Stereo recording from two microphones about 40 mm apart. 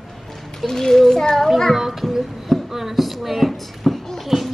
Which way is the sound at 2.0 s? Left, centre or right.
Centre.